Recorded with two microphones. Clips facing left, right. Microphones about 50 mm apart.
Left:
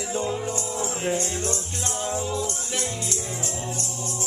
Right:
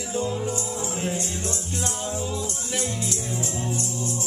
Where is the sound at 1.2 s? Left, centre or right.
Left.